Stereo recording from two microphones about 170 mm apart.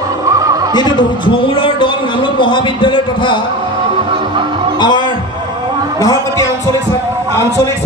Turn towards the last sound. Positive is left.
turn(degrees=20)  # may be behind; listen again after turning